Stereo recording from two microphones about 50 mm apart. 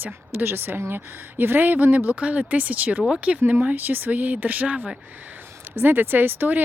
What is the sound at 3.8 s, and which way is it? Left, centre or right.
Speech, right.